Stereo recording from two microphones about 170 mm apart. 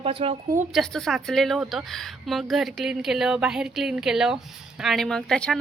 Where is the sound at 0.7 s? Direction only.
Centre (ahead or behind).